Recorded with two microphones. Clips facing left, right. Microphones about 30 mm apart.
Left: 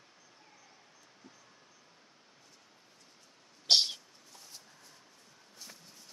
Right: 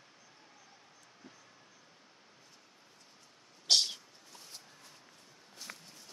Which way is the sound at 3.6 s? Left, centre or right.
Left.